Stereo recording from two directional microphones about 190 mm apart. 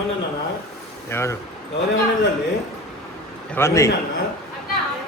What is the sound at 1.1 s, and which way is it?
Speech, 15° left (ahead or behind).